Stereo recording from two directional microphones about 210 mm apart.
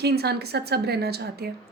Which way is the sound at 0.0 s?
50° right (ahead or behind).